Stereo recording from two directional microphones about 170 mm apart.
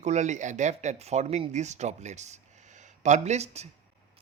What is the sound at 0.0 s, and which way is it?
Speech, 45° right (ahead or behind).